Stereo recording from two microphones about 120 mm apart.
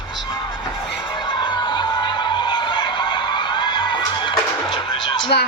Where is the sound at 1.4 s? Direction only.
40° left (ahead or behind).